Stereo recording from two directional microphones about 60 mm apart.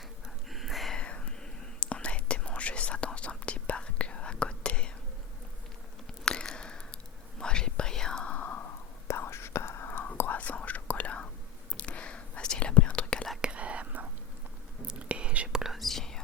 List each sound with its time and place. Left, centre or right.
0.5 s a sound: centre
0.9 s whispering: centre
6.2 s a sound: centre
7.3 s whispering: centre; by 8.6 s left
9.0 s whispering: left
10.2 s whispering: left
13.4 s whispering: centre
15.5 s whispering: centre